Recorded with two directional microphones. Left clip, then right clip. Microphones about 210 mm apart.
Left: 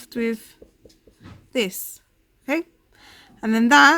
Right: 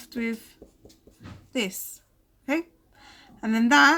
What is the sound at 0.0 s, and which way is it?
Speech, 50° left (ahead or behind).